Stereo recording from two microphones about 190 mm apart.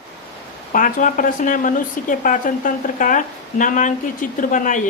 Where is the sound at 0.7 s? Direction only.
45° left (ahead or behind).